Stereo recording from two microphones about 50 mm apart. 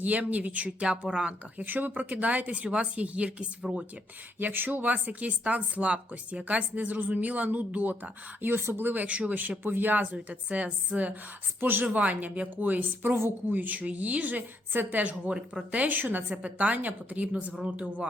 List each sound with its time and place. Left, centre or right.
0.0 s a woman's voice: right
0.9 s speech: centre
1.5 s a woman's voice: right
4.4 s a woman's voice: right
15.3 s speech: centre
15.8 s a woman's voice: right
16.3 s speech: right